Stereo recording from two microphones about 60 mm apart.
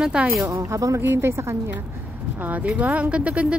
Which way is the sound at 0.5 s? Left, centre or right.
Right.